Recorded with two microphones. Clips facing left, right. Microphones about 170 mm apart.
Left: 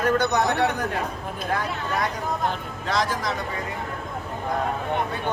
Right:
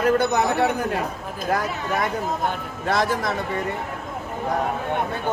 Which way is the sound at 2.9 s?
55° right (ahead or behind).